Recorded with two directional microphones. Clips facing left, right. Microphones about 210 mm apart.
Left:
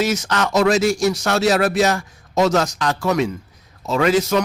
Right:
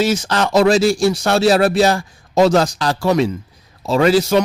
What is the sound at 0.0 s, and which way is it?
A man's voice, 30° right (ahead or behind).